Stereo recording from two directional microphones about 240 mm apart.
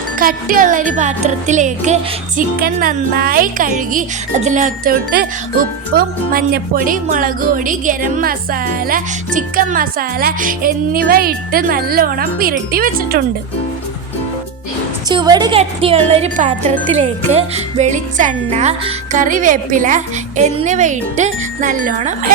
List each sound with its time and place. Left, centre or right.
0.2 s speech: right
15.1 s speech: centre